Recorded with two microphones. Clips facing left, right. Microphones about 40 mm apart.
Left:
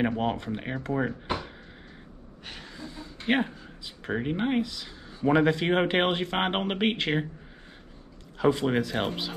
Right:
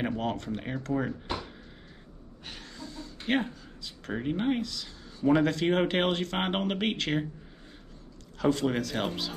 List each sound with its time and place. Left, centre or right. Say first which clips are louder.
0.0 s speech: left 4 dB; centre
8.4 s speech: left 3 dB; centre